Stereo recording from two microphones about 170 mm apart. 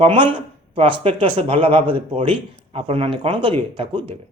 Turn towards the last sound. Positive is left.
turn(degrees=-30)  # may be behind; listen again after turning